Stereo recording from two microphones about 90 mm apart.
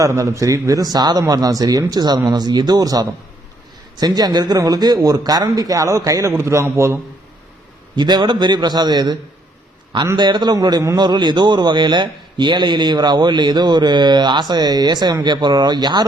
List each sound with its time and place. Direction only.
0.0 s a man's voice: 35° right (ahead or behind)
7.9 s a man's voice: 50° right (ahead or behind)
10.2 s a man's voice: 55° right (ahead or behind)